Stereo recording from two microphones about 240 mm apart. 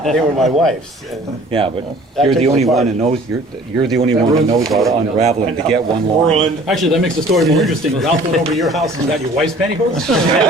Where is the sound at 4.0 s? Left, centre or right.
Right.